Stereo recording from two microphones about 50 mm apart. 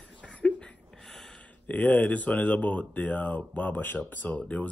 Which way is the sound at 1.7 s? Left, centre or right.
Left.